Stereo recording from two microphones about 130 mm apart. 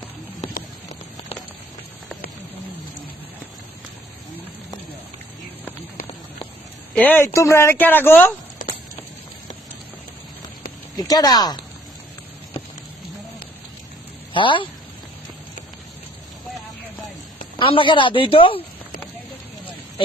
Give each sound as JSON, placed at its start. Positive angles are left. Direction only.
{"t": 6.9, "sound": "speech", "side_deg": 15}
{"t": 8.6, "sound": "a sound", "side_deg": 80}
{"t": 10.9, "sound": "speech", "side_deg": 30}
{"t": 14.3, "sound": "speech", "side_deg": 40}
{"t": 17.6, "sound": "speech", "side_deg": 40}